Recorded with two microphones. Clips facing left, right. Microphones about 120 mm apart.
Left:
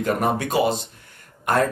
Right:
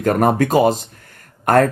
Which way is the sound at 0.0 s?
45° right (ahead or behind).